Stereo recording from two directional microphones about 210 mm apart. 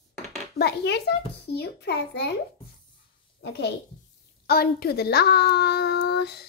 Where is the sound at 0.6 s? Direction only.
50° left (ahead or behind).